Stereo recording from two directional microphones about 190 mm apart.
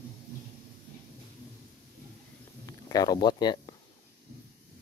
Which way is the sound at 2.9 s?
20° left (ahead or behind).